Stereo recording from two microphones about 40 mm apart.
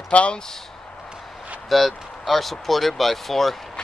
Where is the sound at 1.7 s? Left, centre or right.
Centre.